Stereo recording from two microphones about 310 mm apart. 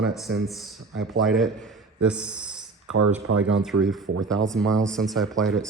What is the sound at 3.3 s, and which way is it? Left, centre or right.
Speech, right.